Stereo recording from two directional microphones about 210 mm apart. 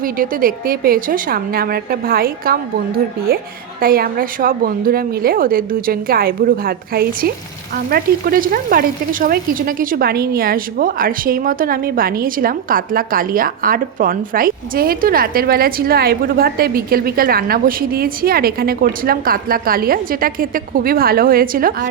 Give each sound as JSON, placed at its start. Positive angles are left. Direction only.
{"t": 0.0, "sound": "frying", "side_deg": -40}